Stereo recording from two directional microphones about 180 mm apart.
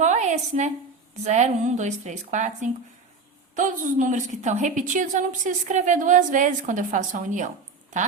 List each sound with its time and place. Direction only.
0.0 s a woman's voice: 40° right (ahead or behind)